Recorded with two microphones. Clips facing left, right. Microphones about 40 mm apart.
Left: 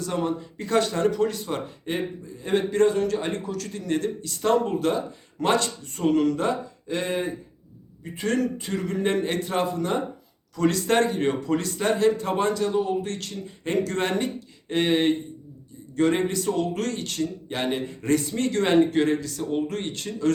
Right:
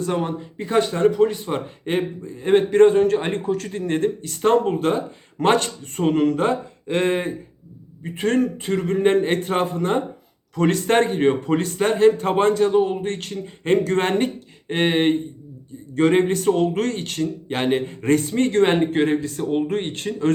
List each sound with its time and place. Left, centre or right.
0.0 s a man's voice: right
1.9 s a man's voice: right